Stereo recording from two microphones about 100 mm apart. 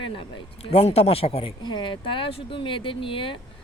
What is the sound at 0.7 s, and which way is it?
Speech, 90° left.